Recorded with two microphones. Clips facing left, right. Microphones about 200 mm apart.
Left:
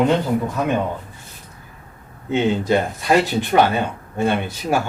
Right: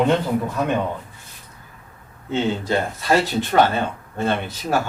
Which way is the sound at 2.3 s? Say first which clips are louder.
Left 4 dB; 15° left (ahead or behind).